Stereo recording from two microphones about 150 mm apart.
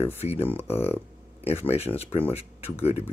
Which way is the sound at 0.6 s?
15° left (ahead or behind).